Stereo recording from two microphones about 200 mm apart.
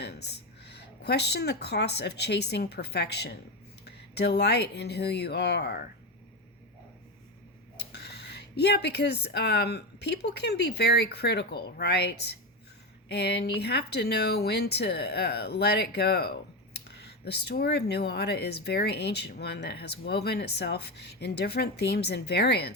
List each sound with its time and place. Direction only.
0.0 s speech: 55° left (ahead or behind)
7.8 s speech: 55° left (ahead or behind)